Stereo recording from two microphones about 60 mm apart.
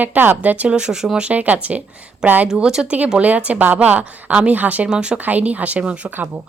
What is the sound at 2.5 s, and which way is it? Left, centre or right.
Speech, centre.